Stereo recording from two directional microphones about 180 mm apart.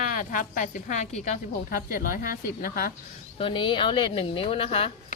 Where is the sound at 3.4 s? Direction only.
30° left (ahead or behind).